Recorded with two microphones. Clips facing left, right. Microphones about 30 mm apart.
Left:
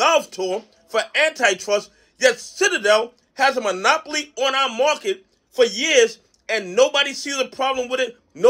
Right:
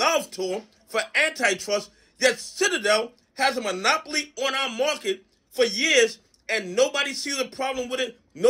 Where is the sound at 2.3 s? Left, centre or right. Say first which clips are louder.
Left 4 dB; centre.